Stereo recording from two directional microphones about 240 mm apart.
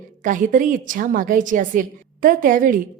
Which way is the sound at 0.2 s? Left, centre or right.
Right.